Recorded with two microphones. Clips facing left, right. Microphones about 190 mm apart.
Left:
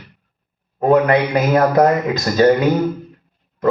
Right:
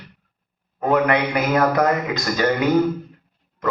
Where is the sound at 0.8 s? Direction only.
25° left (ahead or behind).